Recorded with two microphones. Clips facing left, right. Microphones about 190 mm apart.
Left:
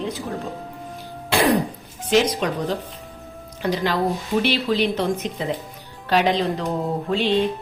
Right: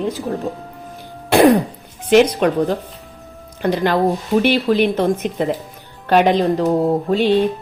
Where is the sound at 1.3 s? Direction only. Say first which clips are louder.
Right 8 dB; 55° right (ahead or behind).